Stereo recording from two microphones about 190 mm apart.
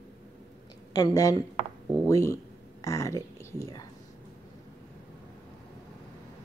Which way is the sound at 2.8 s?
15° left (ahead or behind).